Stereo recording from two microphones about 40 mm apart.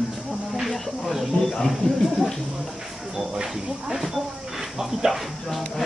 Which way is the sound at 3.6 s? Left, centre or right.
Centre.